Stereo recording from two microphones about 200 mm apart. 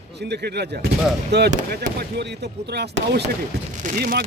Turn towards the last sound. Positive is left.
turn(degrees=-50)  # may be behind; listen again after turning